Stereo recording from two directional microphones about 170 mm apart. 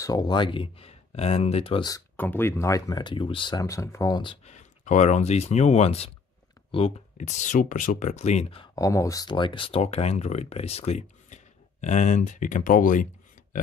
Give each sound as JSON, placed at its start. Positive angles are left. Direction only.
{"t": 0.0, "sound": "speech", "side_deg": 25}
{"t": 2.1, "sound": "speech", "side_deg": 10}
{"t": 4.5, "sound": "speech", "side_deg": 45}
{"t": 8.7, "sound": "speech", "side_deg": 20}